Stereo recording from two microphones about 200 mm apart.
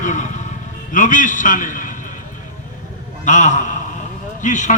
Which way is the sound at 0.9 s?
40° left (ahead or behind).